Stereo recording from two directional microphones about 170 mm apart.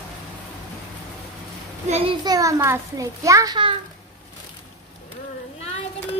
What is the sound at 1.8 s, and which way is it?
Speech, 40° right (ahead or behind).